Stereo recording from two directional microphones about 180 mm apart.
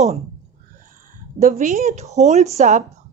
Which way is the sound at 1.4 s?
40° right (ahead or behind).